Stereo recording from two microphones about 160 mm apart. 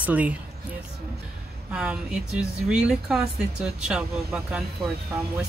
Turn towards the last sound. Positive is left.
turn(degrees=-5)  # may be behind; listen again after turning